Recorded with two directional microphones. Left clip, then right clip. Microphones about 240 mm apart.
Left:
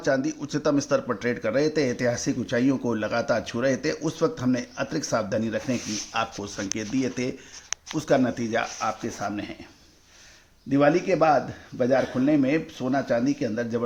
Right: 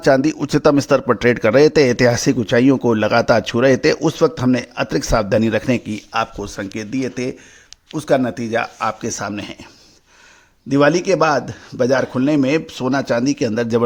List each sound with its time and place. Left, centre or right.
0.0 s speech: right
6.1 s speech: right
8.8 s speech: right
10.7 s speech: right